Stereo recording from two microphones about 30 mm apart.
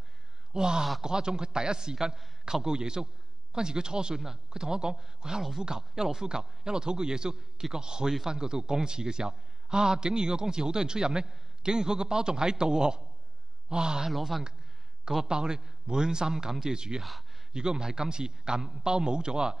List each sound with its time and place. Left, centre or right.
0.5 s a man's voice: right
15.2 s a man's voice: right